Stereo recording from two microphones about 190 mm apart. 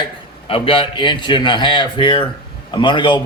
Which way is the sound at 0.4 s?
30° left (ahead or behind).